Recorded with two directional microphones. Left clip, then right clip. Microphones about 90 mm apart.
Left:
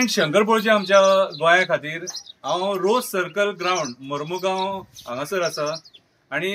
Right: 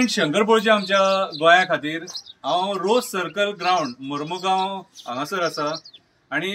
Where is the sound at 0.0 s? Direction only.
50° left (ahead or behind).